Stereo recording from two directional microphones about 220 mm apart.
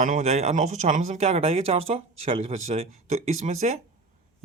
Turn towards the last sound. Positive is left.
turn(degrees=-30)  # may be behind; listen again after turning